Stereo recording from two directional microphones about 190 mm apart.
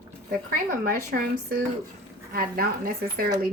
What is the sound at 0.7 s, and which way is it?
A woman's voice, 50° right (ahead or behind).